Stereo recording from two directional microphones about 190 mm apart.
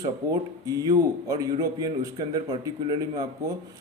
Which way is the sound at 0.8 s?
20° right (ahead or behind).